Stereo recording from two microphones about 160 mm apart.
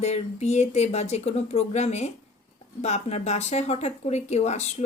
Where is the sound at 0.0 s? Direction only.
45° left (ahead or behind).